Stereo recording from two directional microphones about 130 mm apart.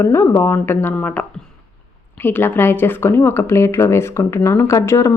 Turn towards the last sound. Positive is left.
turn(degrees=25)  # may be behind; listen again after turning